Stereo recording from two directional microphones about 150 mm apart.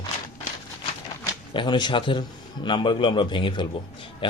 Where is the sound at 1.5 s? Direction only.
30° left (ahead or behind).